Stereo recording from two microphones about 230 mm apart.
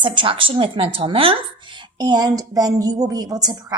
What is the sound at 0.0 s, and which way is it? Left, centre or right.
A woman's voice, right.